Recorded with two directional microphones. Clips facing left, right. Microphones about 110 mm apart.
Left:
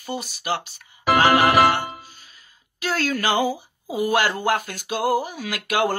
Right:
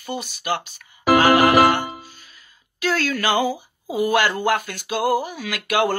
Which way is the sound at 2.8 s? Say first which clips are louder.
Right 2 dB; 40° left (ahead or behind).